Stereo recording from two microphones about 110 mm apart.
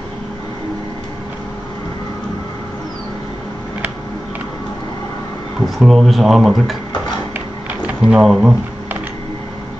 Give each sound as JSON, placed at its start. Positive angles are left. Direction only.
{"t": 5.8, "sound": "speech", "side_deg": 0}
{"t": 7.3, "sound": "a sound", "side_deg": -15}
{"t": 8.2, "sound": "speech", "side_deg": -5}